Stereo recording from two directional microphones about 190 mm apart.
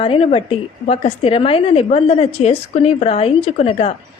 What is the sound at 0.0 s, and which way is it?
A woman's voice, 30° left (ahead or behind).